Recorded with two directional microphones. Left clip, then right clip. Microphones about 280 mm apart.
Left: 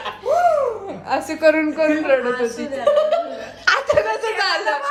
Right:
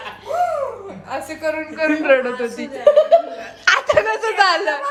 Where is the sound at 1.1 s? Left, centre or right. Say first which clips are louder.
Left 7 dB; centre.